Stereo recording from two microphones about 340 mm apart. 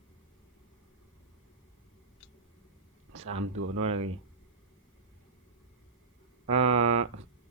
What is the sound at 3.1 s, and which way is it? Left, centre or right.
Speech, right.